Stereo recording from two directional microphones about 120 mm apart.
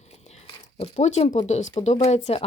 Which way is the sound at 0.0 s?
65° left (ahead or behind).